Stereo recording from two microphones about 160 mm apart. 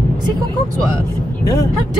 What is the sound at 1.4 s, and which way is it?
Speech, 20° left (ahead or behind).